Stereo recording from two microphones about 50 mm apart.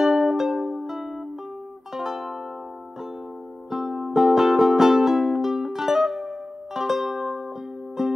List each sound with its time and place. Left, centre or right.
0.0 s music: centre
3.7 s music: centre